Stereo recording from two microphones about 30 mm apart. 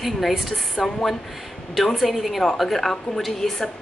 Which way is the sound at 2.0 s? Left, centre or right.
Centre.